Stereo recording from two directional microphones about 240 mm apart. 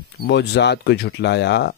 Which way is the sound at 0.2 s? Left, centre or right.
Left.